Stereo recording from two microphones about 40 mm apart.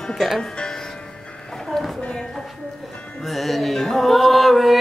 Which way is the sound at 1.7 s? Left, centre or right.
Centre.